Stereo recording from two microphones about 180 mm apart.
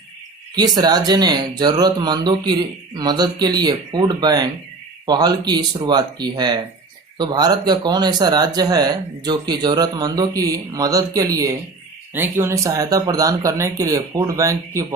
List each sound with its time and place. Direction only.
0.5 s speech: 20° right (ahead or behind)